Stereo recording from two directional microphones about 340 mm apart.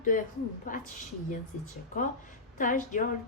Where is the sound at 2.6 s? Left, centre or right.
Left.